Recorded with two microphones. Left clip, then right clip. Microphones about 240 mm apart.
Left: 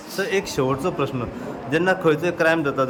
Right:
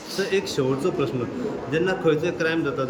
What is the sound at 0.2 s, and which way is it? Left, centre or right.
A man's voice, centre.